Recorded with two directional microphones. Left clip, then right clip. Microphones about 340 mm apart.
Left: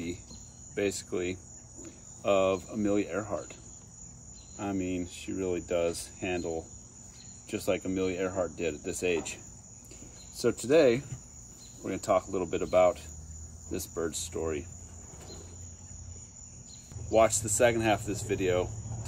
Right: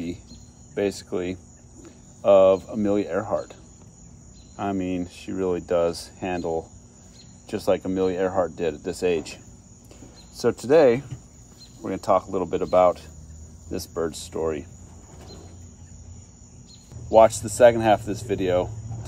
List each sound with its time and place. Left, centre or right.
0.7 s speech: centre
4.6 s speech: centre
7.4 s speech: centre
10.3 s speech: centre
17.1 s speech: centre